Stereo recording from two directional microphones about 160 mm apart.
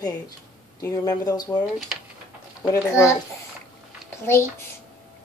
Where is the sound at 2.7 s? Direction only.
15° left (ahead or behind).